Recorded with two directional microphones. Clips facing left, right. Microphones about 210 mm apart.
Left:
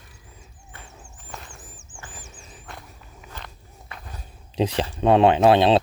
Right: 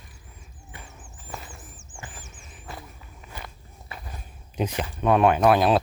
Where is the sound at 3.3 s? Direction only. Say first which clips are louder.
Right 2 dB; 5° right (ahead or behind).